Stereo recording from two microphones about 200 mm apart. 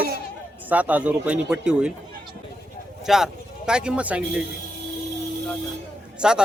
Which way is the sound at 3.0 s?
Centre (ahead or behind).